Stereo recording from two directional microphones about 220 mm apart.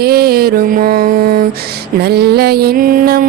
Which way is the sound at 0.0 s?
45° right (ahead or behind).